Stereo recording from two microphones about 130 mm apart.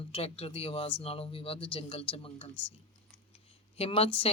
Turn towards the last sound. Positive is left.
turn(degrees=50)  # may be behind; listen again after turning